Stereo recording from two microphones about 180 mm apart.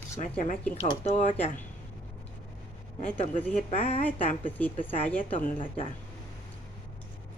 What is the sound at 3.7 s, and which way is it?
Speech, 40° left (ahead or behind).